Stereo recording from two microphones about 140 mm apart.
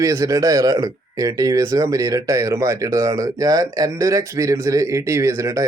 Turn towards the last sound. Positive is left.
turn(degrees=-20)  # may be behind; listen again after turning